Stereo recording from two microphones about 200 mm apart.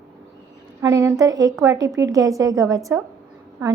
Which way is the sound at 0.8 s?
15° right (ahead or behind).